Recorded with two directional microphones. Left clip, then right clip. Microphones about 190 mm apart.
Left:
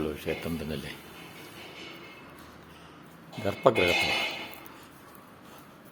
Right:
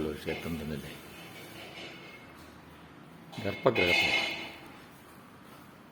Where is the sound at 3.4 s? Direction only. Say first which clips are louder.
Left 3 dB; centre (ahead or behind).